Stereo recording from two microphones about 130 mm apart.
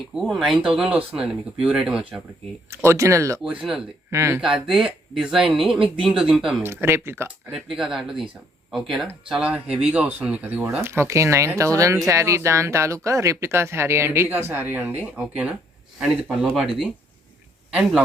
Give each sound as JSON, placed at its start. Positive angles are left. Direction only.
{"t": 0.1, "sound": "speech", "side_deg": 0}
{"t": 2.6, "sound": "speech", "side_deg": -20}
{"t": 3.4, "sound": "speech", "side_deg": -5}
{"t": 4.1, "sound": "speech", "side_deg": -20}
{"t": 4.6, "sound": "speech", "side_deg": -5}
{"t": 6.6, "sound": "speech", "side_deg": -15}
{"t": 7.5, "sound": "speech", "side_deg": -5}
{"t": 16.0, "sound": "speech", "side_deg": -5}
{"t": 17.7, "sound": "a man's voice", "side_deg": -5}